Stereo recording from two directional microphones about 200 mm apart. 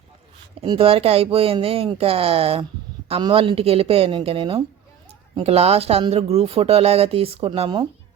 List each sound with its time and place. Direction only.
0.6 s speech: 25° right (ahead or behind)